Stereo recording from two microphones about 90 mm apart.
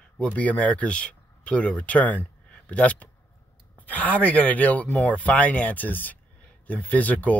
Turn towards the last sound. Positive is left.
turn(degrees=15)  # may be behind; listen again after turning